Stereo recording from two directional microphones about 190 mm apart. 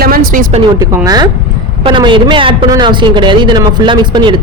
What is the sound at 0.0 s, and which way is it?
Speech, 50° right (ahead or behind).